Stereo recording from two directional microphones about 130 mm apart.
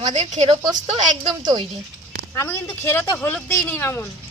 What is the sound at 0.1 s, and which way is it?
A woman's voice, 60° right (ahead or behind).